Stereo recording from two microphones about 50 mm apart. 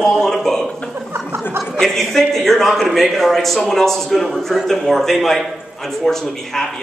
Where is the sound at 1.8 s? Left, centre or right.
Centre.